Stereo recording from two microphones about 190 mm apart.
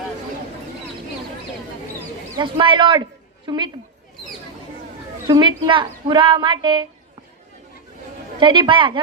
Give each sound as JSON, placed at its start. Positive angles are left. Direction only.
{"t": 2.3, "sound": "speech", "side_deg": -25}
{"t": 5.3, "sound": "speech", "side_deg": -25}
{"t": 8.4, "sound": "speech", "side_deg": -25}